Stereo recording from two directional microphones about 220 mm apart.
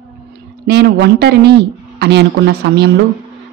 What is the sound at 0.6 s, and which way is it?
A woman's voice, 50° right (ahead or behind).